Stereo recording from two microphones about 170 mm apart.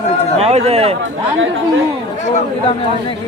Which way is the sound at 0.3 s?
40° right (ahead or behind).